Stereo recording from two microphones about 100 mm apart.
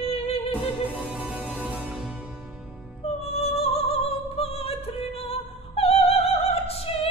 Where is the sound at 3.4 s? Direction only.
90° left.